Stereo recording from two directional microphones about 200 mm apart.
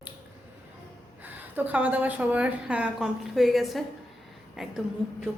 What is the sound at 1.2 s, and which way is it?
A woman's voice, 10° right (ahead or behind).